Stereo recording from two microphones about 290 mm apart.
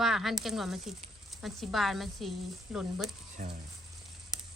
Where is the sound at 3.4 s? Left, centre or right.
Right.